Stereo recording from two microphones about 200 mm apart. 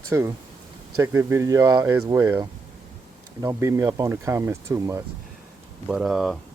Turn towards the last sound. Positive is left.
turn(degrees=0)  # may be behind; listen again after turning